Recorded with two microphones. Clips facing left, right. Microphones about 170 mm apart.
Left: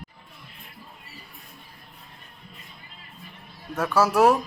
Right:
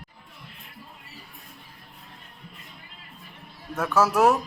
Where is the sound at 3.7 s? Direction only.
10° left (ahead or behind).